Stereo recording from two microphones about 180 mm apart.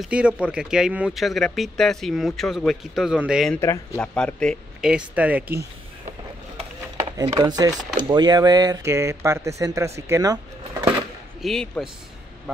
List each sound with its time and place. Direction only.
0.0 s speech: 5° right (ahead or behind)
3.6 s speech: 15° left (ahead or behind)
4.0 s speech: 5° left (ahead or behind)
7.2 s speech: 20° right (ahead or behind)
11.4 s speech: 5° left (ahead or behind)